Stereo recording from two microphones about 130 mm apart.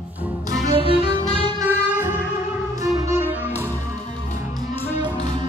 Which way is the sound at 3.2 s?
15° right (ahead or behind).